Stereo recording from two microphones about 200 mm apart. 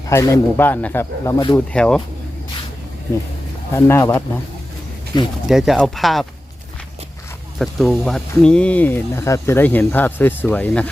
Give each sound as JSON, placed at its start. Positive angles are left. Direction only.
{"t": 0.1, "sound": "speech", "side_deg": 15}
{"t": 1.5, "sound": "speech", "side_deg": 5}
{"t": 3.8, "sound": "speech", "side_deg": 15}
{"t": 5.5, "sound": "speech", "side_deg": 0}
{"t": 7.6, "sound": "speech", "side_deg": 0}